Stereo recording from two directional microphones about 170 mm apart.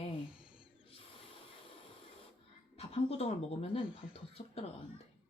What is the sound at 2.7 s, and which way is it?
A woman's voice, 40° left (ahead or behind).